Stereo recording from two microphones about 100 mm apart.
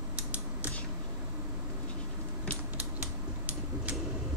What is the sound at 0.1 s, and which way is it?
Creak, 15° right (ahead or behind).